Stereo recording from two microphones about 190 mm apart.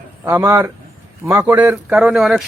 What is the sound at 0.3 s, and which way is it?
Speech, 15° right (ahead or behind).